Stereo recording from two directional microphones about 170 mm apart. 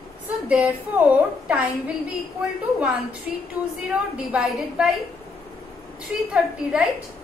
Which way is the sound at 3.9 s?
5° right (ahead or behind).